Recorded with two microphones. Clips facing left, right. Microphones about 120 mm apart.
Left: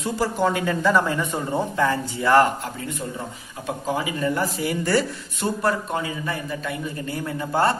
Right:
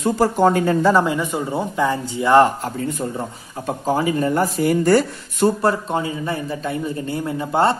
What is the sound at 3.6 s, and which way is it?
Speech, 40° right (ahead or behind).